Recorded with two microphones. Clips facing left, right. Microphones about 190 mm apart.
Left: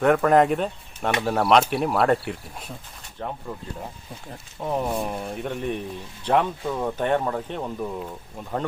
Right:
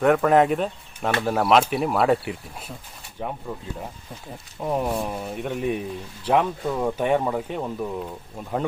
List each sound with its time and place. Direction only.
0.0 s speech: centre (ahead or behind)
4.3 s speech: 5° right (ahead or behind)